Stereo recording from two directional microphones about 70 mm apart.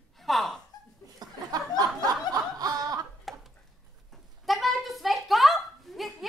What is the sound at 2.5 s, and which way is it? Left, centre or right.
Snicker, right.